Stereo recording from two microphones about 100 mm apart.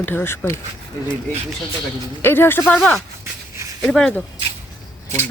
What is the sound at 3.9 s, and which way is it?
Speech, 5° left (ahead or behind).